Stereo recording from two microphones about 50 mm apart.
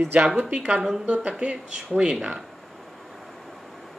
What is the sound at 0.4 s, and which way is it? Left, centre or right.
Speech, right.